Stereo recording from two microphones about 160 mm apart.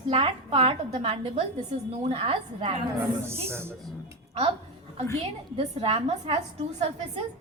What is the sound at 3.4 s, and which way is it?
Speech, 15° right (ahead or behind).